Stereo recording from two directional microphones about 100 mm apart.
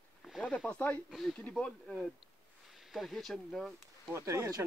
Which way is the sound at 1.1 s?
5° left (ahead or behind).